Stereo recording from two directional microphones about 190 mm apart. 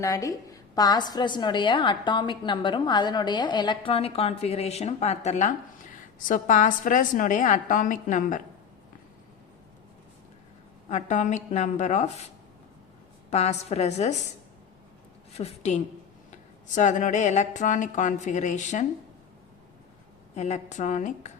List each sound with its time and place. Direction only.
0.0 s a woman's voice: 15° left (ahead or behind); by 8.4 s 45° left (ahead or behind)
10.8 s speech: 40° left (ahead or behind)
13.3 s speech: 35° left (ahead or behind)
15.3 s a woman's voice: 35° left (ahead or behind)
20.3 s speech: 35° left (ahead or behind)